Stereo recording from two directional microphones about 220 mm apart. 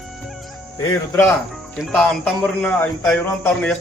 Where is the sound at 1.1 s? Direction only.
5° left (ahead or behind).